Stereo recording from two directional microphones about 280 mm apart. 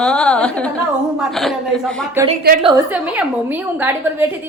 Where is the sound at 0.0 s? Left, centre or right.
Centre.